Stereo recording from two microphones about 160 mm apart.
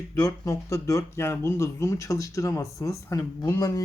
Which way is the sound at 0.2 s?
20° left (ahead or behind).